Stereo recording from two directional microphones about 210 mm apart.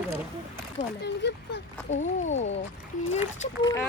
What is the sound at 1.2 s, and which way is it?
Speech, 55° left (ahead or behind).